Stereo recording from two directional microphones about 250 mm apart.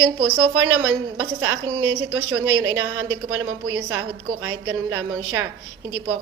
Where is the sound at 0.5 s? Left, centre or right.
Right.